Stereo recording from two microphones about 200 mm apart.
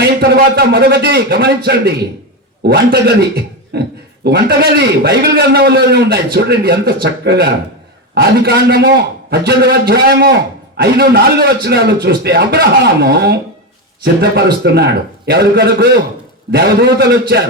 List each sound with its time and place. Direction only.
0.0 s a man's voice: 50° right (ahead or behind)